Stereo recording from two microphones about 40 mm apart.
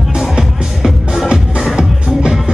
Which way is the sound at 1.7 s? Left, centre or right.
Centre.